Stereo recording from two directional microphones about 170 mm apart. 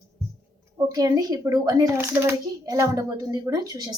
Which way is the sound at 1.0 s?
20° right (ahead or behind).